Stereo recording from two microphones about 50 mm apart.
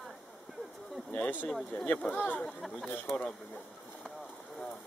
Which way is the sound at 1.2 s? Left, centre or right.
Left.